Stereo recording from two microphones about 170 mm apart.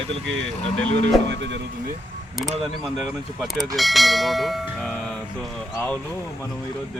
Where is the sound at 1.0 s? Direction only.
90° right.